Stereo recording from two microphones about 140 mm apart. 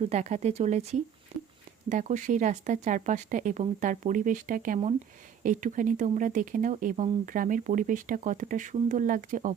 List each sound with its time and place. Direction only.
0.0 s speech: 50° right (ahead or behind); by 9.6 s 70° right (ahead or behind)